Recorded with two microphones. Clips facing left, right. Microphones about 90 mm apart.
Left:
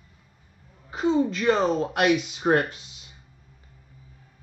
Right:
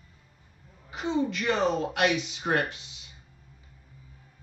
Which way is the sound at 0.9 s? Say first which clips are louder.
Left 5 dB; 35° left (ahead or behind).